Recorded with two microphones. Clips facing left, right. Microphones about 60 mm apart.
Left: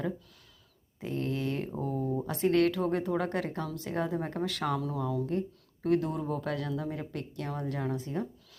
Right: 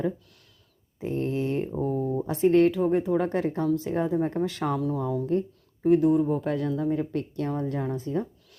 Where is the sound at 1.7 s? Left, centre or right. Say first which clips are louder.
Right 5 dB; centre.